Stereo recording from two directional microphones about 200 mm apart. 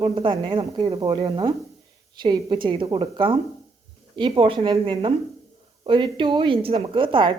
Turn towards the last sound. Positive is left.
turn(degrees=-25)  # may be behind; listen again after turning